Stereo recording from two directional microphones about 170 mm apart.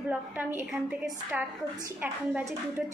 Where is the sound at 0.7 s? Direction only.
5° right (ahead or behind).